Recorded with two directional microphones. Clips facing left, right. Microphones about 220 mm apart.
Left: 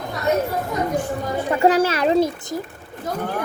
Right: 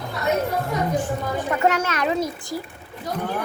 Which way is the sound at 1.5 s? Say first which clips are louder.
Left 6 dB; 30° left (ahead or behind).